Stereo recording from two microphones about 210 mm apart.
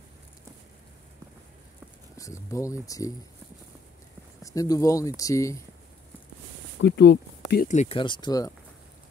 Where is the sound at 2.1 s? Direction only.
15° left (ahead or behind).